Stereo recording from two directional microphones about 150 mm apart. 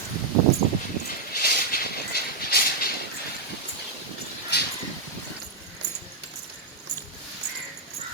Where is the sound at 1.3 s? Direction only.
75° left (ahead or behind).